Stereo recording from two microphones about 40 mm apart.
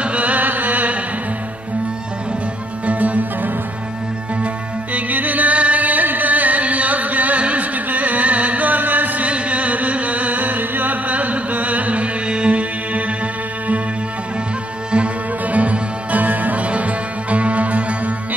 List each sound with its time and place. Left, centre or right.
0.0 s music: right
2.9 s music: right
4.9 s music: right
9.3 s music: right
15.4 s music: right